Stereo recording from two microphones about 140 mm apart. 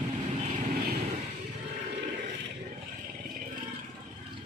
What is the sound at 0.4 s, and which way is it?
Vehicle, 60° right (ahead or behind).